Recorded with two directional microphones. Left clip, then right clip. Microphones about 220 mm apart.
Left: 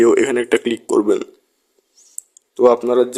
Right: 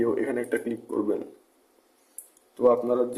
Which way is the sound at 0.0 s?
45° left (ahead or behind).